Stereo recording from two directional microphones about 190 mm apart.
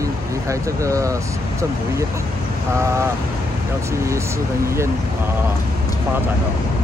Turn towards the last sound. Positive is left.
turn(degrees=-15)  # may be behind; listen again after turning